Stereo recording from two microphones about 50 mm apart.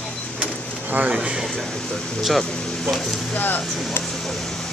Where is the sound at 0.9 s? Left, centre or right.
Right.